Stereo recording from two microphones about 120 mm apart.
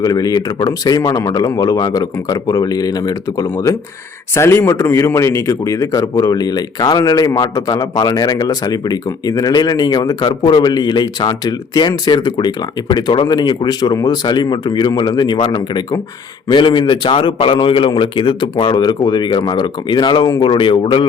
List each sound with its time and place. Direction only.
0.0 s a man's voice: 30° left (ahead or behind)